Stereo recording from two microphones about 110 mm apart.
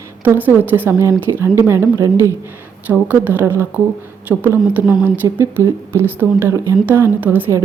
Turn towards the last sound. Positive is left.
turn(degrees=-20)  # may be behind; listen again after turning